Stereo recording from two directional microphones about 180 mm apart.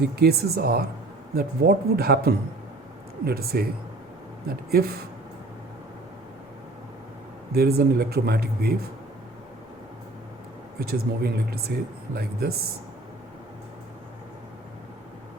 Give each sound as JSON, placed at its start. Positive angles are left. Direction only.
{"t": 0.0, "sound": "speech", "side_deg": -60}
{"t": 7.5, "sound": "speech", "side_deg": -60}
{"t": 10.8, "sound": "speech", "side_deg": -60}